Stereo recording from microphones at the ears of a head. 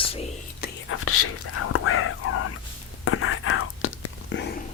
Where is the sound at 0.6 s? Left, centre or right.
Left.